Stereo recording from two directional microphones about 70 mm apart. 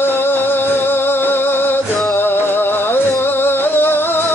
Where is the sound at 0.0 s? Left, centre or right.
Left.